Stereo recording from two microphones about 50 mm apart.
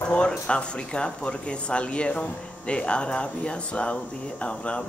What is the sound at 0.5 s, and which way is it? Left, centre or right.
Speech, centre.